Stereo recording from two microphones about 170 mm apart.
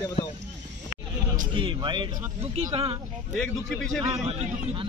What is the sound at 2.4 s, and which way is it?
Speech, 35° right (ahead or behind).